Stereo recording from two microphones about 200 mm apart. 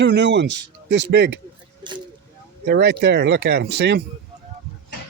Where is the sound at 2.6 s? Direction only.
55° right (ahead or behind).